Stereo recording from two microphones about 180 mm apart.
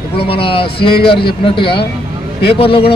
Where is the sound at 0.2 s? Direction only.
30° left (ahead or behind).